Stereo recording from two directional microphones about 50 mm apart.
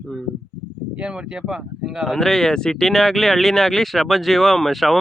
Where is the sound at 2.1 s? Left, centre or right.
Centre.